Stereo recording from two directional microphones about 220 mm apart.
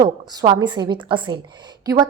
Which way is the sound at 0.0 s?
20° right (ahead or behind).